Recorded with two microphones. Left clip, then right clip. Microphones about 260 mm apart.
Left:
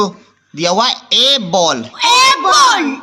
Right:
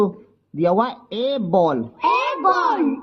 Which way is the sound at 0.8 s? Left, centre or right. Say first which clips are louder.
Left 10 dB; centre.